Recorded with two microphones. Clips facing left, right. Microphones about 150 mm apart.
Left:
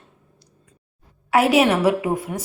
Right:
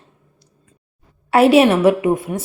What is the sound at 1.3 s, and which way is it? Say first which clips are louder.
A woman's voice: right 5 dB; 25° right (ahead or behind).